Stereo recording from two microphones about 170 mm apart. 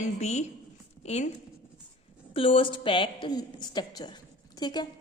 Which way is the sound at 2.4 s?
30° left (ahead or behind).